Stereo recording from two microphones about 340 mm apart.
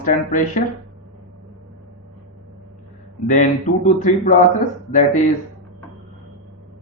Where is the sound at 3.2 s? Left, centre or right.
Left.